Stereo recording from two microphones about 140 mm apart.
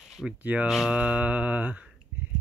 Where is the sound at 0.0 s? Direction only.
Centre (ahead or behind).